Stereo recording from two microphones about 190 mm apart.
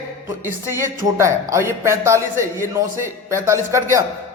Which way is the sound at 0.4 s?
15° right (ahead or behind).